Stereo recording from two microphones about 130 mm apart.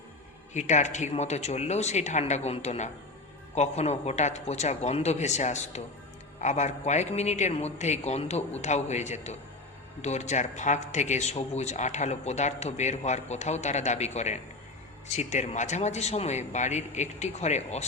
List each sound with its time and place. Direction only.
0.5 s a man's voice: 65° left (ahead or behind)